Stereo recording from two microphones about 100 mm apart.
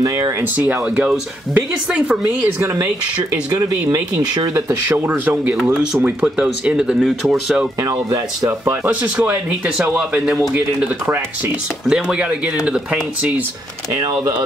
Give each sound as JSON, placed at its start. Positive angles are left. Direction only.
{"t": 0.4, "sound": "speech", "side_deg": -15}
{"t": 2.6, "sound": "speech", "side_deg": -30}
{"t": 3.9, "sound": "speech", "side_deg": -35}
{"t": 4.8, "sound": "speech", "side_deg": -15}
{"t": 7.8, "sound": "speech", "side_deg": -35}
{"t": 8.8, "sound": "speech", "side_deg": -15}